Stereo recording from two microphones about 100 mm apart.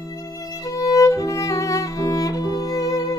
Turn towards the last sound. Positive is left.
turn(degrees=35)  # may be behind; listen again after turning